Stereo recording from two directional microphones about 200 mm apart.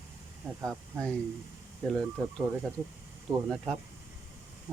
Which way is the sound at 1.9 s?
Centre (ahead or behind).